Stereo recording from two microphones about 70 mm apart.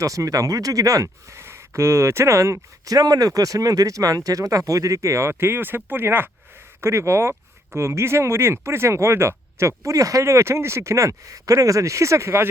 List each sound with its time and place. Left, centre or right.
0.0 s speech: right